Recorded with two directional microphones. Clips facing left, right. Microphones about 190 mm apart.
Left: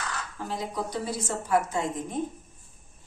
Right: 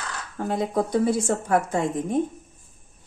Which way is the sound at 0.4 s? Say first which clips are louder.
Right 9 dB; 55° right (ahead or behind).